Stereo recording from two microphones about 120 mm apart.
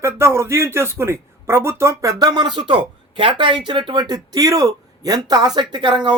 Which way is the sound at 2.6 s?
45° right (ahead or behind).